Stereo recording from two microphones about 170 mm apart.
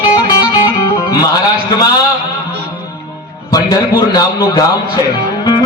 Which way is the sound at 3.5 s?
20° left (ahead or behind).